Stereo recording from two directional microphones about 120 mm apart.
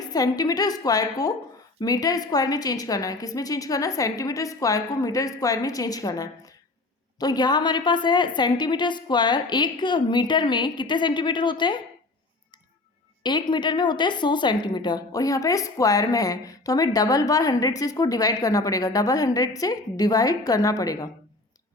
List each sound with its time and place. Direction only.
0.1 s a woman's voice: 30° left (ahead or behind)
13.2 s a woman's voice: 40° left (ahead or behind)